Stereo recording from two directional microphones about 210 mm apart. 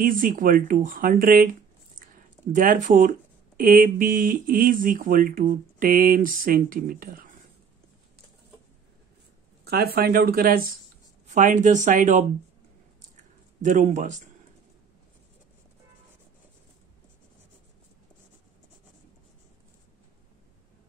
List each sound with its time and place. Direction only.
0.0 s speech: 40° right (ahead or behind)
9.7 s speech: 45° right (ahead or behind)
13.1 s a sound: 35° right (ahead or behind)